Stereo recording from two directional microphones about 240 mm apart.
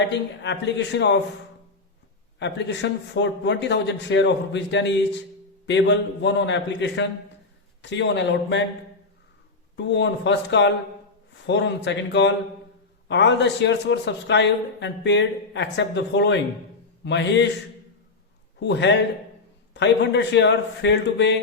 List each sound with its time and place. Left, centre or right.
0.1 s a man's voice: left
2.4 s a man's voice: left
9.7 s a man's voice: left
18.6 s a man's voice: left